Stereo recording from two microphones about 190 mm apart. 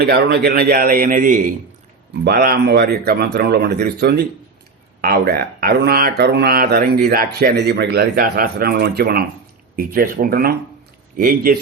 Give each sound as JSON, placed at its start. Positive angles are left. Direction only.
{"t": 0.0, "sound": "a man's voice", "side_deg": -55}